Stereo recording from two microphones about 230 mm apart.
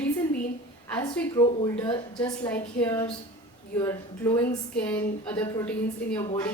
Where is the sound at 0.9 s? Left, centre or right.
Centre.